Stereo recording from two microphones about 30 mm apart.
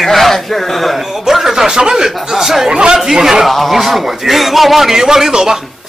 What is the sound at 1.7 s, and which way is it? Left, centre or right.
Speech, right.